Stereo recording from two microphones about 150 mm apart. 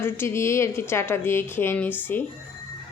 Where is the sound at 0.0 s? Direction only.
15° left (ahead or behind).